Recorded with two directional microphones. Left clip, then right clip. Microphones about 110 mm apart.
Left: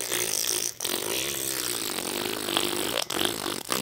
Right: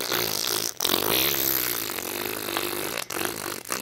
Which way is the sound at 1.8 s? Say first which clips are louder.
Even; 10° left (ahead or behind).